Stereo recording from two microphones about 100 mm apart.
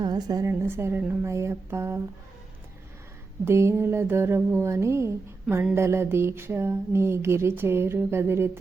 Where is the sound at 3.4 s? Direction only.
25° right (ahead or behind).